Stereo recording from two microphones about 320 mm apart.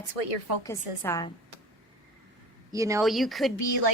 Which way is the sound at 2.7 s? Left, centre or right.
Centre.